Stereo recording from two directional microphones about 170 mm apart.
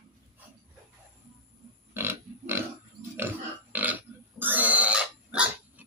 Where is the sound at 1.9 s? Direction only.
15° right (ahead or behind).